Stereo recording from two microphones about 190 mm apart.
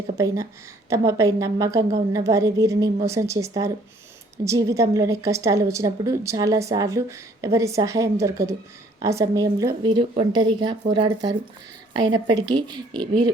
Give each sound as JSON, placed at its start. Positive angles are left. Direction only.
{"t": 0.9, "sound": "a woman's voice", "side_deg": -15}